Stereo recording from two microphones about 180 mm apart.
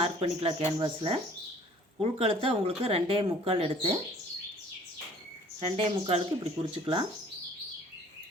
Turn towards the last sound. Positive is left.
turn(degrees=-30)  # may be behind; listen again after turning